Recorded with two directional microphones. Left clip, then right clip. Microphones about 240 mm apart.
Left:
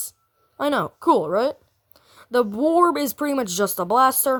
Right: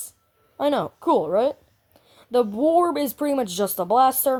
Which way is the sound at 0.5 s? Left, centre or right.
Left.